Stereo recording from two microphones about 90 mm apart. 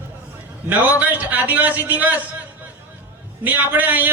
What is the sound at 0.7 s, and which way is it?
A man's voice, 20° right (ahead or behind).